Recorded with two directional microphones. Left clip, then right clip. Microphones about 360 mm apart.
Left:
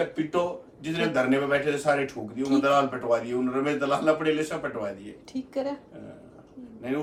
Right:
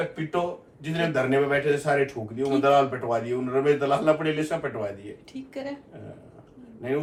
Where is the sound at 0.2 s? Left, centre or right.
Centre.